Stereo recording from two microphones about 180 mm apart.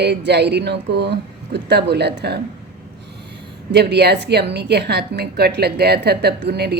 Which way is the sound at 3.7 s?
65° right (ahead or behind).